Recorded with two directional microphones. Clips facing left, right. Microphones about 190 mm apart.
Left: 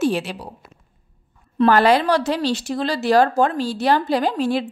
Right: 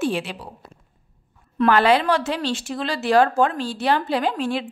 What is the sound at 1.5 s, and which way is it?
A woman's voice, 40° left (ahead or behind).